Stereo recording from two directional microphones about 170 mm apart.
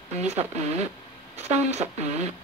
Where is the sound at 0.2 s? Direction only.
40° right (ahead or behind).